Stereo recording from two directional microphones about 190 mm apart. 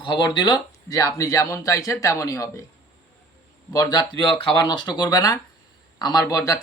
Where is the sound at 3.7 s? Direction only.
20° left (ahead or behind).